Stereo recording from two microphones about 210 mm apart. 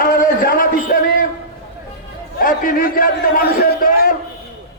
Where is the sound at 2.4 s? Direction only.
40° left (ahead or behind).